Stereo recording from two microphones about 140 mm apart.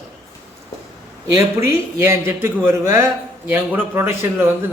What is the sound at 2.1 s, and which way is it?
A man's voice, 20° right (ahead or behind).